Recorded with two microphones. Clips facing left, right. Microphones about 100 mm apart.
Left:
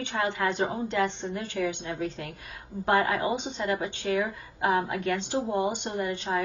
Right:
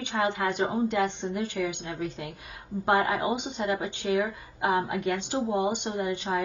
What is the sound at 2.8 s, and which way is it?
A woman's voice, 20° right (ahead or behind).